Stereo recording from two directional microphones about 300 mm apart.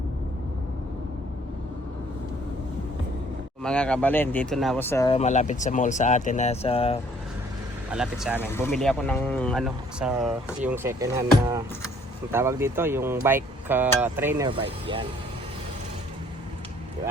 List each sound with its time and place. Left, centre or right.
3.6 s speech: centre
7.9 s speech: centre